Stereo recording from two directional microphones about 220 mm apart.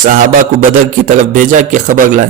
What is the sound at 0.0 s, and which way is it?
A man's voice, 40° right (ahead or behind).